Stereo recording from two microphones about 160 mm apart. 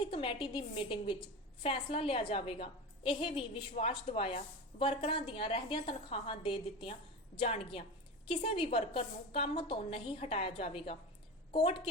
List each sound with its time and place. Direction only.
0.0 s a woman's voice: 35° left (ahead or behind)